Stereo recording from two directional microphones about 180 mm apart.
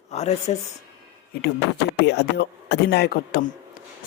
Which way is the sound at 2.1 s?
70° left (ahead or behind).